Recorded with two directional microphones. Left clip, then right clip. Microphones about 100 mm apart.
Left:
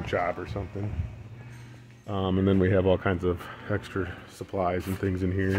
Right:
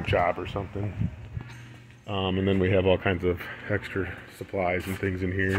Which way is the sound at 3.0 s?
30° left (ahead or behind).